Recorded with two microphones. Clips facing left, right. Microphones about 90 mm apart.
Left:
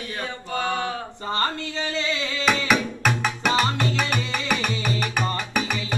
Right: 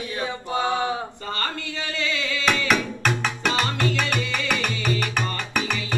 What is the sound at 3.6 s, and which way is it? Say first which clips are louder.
Music: even; 25° left (ahead or behind).